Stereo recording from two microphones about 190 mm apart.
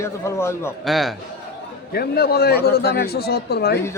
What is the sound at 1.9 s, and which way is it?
Speech, 55° left (ahead or behind).